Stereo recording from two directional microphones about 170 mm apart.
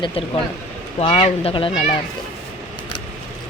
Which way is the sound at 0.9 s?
35° left (ahead or behind).